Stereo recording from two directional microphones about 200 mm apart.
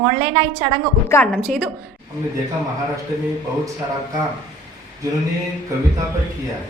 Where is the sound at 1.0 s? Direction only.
10° left (ahead or behind).